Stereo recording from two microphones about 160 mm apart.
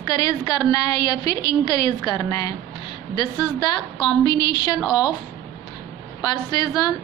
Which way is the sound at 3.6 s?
30° left (ahead or behind).